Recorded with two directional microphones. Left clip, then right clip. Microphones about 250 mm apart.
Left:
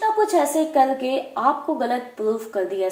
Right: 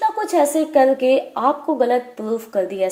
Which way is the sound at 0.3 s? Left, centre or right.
Right.